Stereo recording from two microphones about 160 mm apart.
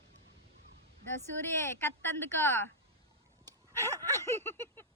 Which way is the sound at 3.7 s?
15° left (ahead or behind).